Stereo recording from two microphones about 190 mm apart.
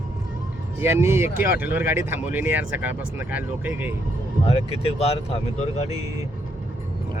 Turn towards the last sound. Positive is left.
turn(degrees=35)  # may be behind; listen again after turning